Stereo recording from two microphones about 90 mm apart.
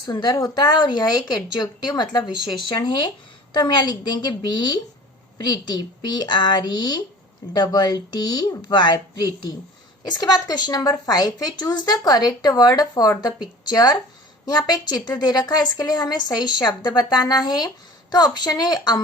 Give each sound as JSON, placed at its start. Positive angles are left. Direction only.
{"t": 0.0, "sound": "a woman's voice", "side_deg": 50}